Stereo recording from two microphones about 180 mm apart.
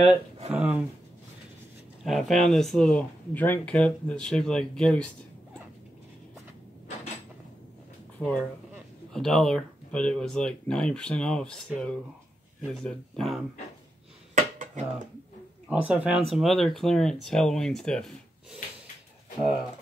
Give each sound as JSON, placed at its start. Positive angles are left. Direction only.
{"t": 0.0, "sound": "a sound", "side_deg": -35}
{"t": 0.5, "sound": "speech", "side_deg": -5}
{"t": 2.0, "sound": "speech", "side_deg": 0}
{"t": 8.2, "sound": "speech", "side_deg": 5}
{"t": 12.7, "sound": "speech", "side_deg": 0}
{"t": 14.3, "sound": "dishes", "side_deg": -45}
{"t": 15.7, "sound": "speech", "side_deg": -5}